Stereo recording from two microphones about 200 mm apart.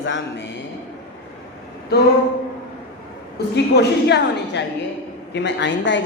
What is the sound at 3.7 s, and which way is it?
A woman's voice, 55° left (ahead or behind).